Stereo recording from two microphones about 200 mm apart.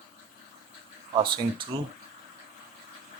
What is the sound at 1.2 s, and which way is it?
Speech, 25° right (ahead or behind).